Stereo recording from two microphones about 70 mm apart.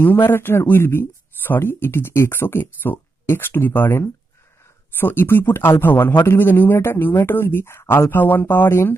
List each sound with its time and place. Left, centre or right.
0.0 s speech: left